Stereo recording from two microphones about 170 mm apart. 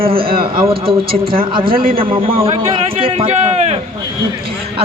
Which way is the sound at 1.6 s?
60° right (ahead or behind).